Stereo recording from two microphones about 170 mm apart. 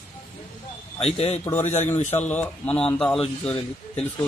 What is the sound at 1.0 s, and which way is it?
Speech, 40° left (ahead or behind).